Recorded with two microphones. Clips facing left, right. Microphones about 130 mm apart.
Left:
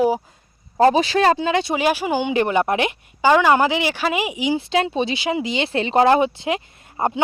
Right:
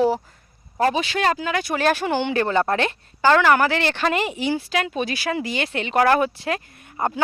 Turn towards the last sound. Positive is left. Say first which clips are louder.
# left 3 dB
turn(degrees=25)  # may be behind; listen again after turning